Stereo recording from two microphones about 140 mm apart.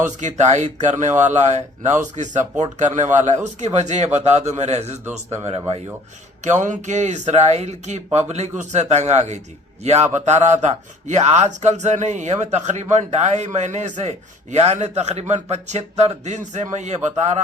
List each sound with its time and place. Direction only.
0.0 s speech: 60° right (ahead or behind); by 5.8 s 45° right (ahead or behind)
6.4 s speech: 60° right (ahead or behind)